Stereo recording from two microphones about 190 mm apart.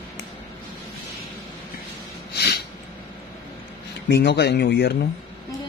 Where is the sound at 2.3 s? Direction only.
60° left (ahead or behind).